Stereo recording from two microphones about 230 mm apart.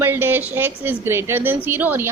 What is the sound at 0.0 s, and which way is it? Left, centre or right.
A woman's voice, centre.